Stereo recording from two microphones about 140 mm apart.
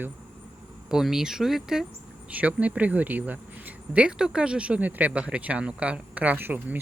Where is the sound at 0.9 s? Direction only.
5° right (ahead or behind).